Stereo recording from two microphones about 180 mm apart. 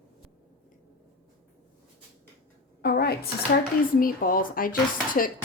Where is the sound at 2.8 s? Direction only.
60° left (ahead or behind).